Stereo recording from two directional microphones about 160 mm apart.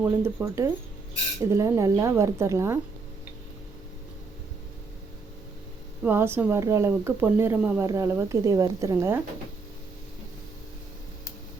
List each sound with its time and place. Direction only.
0.0 s speech: 15° right (ahead or behind)
6.0 s speech: 15° right (ahead or behind)